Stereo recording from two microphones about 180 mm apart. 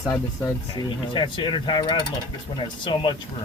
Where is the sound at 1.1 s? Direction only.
25° left (ahead or behind).